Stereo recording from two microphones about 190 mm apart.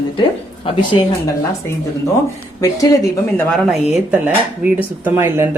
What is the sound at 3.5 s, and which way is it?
Speech, centre (ahead or behind).